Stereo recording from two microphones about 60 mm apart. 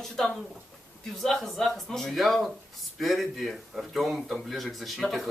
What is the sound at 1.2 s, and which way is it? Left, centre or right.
Speech, centre.